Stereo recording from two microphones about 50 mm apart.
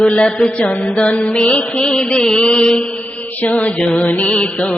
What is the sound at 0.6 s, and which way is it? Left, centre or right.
Mantra, left.